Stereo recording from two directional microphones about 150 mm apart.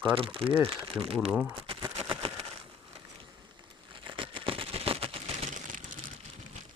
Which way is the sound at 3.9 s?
35° right (ahead or behind).